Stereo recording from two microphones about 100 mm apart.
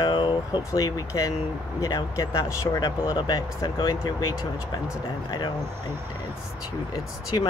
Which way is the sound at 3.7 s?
55° left (ahead or behind).